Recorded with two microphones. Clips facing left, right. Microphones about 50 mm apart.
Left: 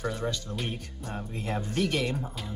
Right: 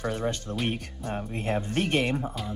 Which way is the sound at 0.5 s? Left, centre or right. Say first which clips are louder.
Right 5 dB; right.